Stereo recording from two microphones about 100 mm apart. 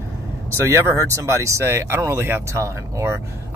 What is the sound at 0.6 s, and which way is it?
Speech, 30° right (ahead or behind).